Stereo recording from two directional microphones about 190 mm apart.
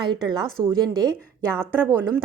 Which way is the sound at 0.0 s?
25° right (ahead or behind).